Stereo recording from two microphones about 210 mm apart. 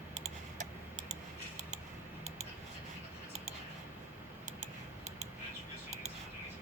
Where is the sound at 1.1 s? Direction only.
35° right (ahead or behind).